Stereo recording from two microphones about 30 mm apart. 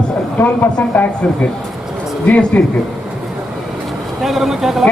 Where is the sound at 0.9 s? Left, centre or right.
Left.